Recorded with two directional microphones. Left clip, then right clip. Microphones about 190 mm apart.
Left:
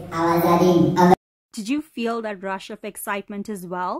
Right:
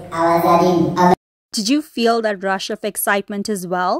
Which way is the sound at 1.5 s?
20° right (ahead or behind).